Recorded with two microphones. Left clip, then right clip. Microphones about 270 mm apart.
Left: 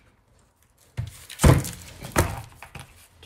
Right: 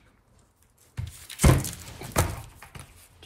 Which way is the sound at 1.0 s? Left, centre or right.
Centre.